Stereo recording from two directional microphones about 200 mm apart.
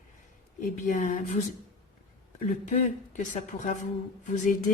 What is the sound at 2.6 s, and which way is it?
Speech, 35° left (ahead or behind).